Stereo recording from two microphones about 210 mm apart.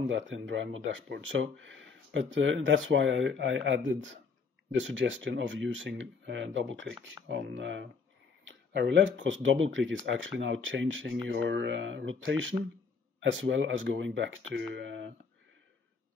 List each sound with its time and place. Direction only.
0.0 s speech: 65° right (ahead or behind)